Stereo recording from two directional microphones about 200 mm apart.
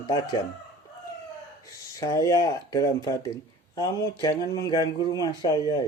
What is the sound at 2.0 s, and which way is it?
Speech, 15° left (ahead or behind).